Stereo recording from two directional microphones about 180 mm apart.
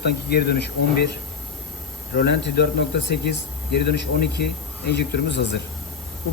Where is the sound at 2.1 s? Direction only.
65° left (ahead or behind).